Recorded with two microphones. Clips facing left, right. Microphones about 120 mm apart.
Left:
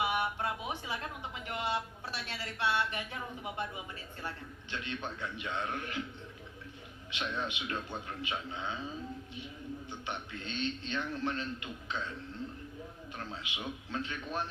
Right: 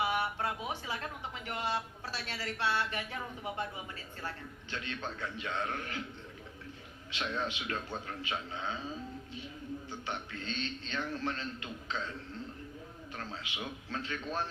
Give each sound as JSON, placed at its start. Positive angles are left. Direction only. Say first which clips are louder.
{"t": 0.0, "sound": "a sound", "louder": "even", "side_deg": 20}
{"t": 1.5, "sound": "a man's voice", "louder": "left 1 dB", "side_deg": 20}
{"t": 4.7, "sound": "a man's voice", "louder": "left 1 dB", "side_deg": 20}
{"t": 7.1, "sound": "a man's voice", "louder": "right 1 dB", "side_deg": 20}
{"t": 10.1, "sound": "a man's voice", "louder": "right 1 dB", "side_deg": 20}
{"t": 13.1, "sound": "a man's voice", "louder": "right 1 dB", "side_deg": 20}